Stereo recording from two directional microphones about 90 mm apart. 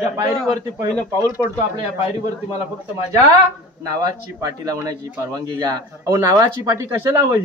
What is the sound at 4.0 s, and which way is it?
A man's voice, 45° right (ahead or behind).